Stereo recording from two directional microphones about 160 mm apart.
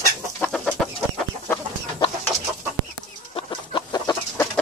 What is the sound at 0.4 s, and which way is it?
Chicken, 10° left (ahead or behind).